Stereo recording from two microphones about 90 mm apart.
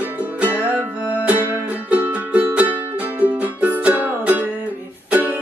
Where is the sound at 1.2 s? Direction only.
20° right (ahead or behind).